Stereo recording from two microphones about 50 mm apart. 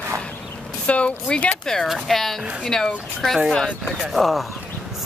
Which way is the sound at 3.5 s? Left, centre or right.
Left.